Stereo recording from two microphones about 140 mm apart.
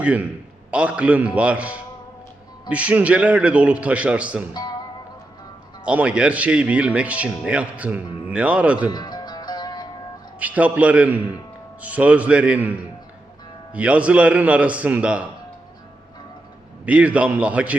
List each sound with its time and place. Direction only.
0.0 s a man's voice: 10° right (ahead or behind)
4.5 s speech: 30° left (ahead or behind)
5.8 s speech: 10° right (ahead or behind)
8.9 s music: 30° left (ahead or behind)
10.4 s speech: 10° right (ahead or behind)
16.8 s speech: 10° right (ahead or behind)